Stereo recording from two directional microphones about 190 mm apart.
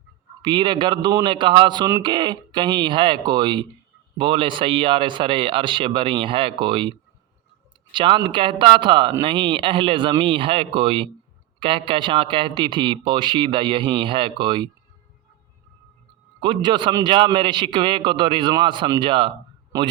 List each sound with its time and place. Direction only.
0.4 s a man's voice: 25° right (ahead or behind)
7.9 s a man's voice: 25° right (ahead or behind)
16.4 s a man's voice: 25° right (ahead or behind)